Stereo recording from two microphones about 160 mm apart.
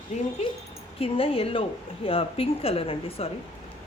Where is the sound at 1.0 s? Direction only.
35° left (ahead or behind).